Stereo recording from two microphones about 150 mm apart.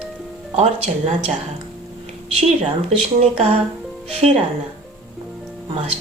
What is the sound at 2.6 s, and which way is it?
Speech, 45° right (ahead or behind).